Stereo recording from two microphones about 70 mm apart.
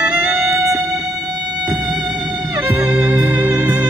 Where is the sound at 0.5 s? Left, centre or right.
Right.